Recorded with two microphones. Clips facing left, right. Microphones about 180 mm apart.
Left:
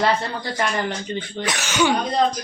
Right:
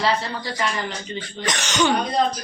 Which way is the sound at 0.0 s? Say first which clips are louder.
Left 2 dB; 50° left (ahead or behind).